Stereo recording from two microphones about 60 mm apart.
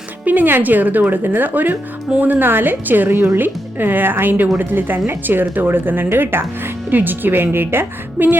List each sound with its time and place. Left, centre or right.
0.3 s speech: right